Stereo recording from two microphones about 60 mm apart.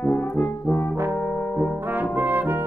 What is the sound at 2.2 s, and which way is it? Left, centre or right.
Brass instrument, right.